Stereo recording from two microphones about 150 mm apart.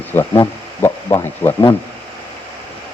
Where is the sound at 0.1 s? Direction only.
15° left (ahead or behind).